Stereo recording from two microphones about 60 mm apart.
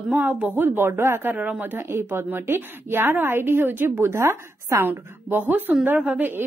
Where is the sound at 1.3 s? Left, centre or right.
Right.